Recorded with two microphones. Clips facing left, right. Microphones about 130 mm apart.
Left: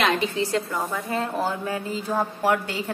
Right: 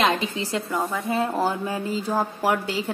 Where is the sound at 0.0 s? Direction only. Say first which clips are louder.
Even; 20° right (ahead or behind).